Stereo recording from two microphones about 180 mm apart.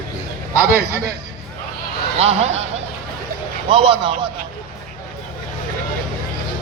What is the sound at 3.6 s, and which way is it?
Speech, 30° right (ahead or behind).